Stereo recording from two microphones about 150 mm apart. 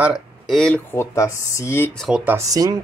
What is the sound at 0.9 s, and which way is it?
Speech, 20° left (ahead or behind).